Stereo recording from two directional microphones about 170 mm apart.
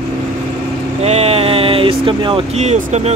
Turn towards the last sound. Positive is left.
turn(degrees=-40)  # may be behind; listen again after turning